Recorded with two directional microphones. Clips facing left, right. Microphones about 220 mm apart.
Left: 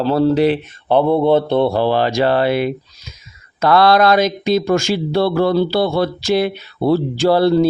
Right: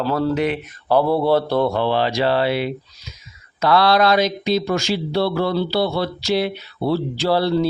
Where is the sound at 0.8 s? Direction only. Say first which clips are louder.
Left 3 dB; 20° left (ahead or behind).